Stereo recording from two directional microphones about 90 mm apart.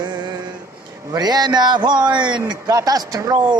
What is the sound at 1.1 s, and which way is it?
A man's voice, 50° right (ahead or behind).